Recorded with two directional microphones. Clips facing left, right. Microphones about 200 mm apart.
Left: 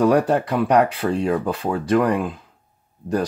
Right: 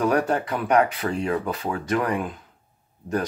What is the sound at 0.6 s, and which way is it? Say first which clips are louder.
Speech: left 2 dB; 30° left (ahead or behind).